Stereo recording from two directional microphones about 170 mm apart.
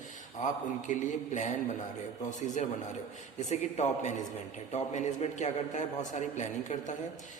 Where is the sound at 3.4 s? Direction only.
45° left (ahead or behind).